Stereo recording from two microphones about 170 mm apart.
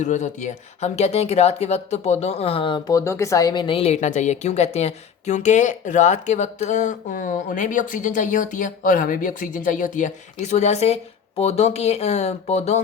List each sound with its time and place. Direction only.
0.0 s speech: 45° left (ahead or behind)